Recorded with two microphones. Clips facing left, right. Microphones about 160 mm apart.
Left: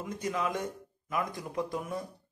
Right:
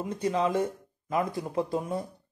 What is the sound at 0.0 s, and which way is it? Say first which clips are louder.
A man's voice: right 6 dB; 30° right (ahead or behind).